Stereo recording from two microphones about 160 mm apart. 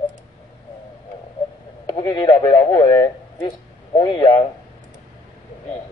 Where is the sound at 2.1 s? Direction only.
20° left (ahead or behind).